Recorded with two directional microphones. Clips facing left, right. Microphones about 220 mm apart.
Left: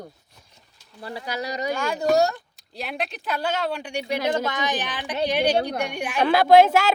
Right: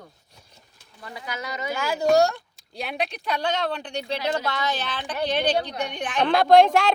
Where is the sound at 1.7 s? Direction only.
Centre (ahead or behind).